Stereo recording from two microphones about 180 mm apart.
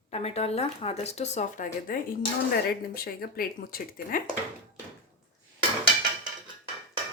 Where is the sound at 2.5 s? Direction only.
55° left (ahead or behind).